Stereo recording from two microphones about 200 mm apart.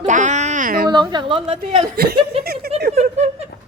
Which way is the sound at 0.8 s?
20° right (ahead or behind).